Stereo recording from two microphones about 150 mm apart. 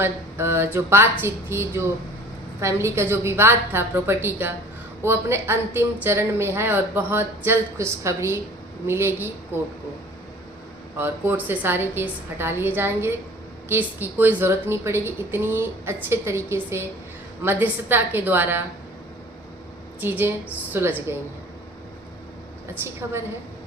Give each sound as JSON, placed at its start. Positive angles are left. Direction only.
{"t": 0.0, "sound": "speech", "side_deg": -15}
{"t": 10.9, "sound": "speech", "side_deg": -15}
{"t": 20.0, "sound": "speech", "side_deg": -15}
{"t": 22.8, "sound": "speech", "side_deg": -15}